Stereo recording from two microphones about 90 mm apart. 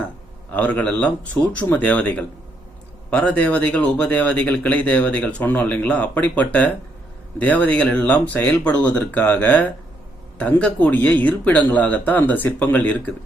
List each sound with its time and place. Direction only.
0.5 s speech: 15° left (ahead or behind)